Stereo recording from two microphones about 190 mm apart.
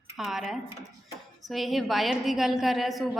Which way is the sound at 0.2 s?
Centre (ahead or behind).